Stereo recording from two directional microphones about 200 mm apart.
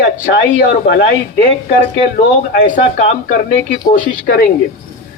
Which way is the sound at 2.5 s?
40° left (ahead or behind).